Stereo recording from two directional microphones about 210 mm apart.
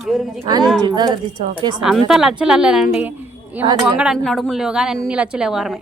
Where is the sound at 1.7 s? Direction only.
Centre (ahead or behind).